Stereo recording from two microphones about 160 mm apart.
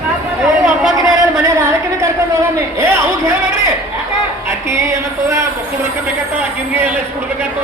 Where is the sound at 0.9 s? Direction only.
20° right (ahead or behind).